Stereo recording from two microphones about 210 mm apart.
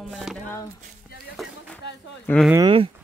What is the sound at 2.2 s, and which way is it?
Speech, 5° left (ahead or behind).